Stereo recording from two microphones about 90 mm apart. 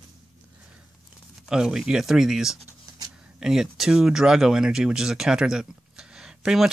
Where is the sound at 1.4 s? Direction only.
10° right (ahead or behind).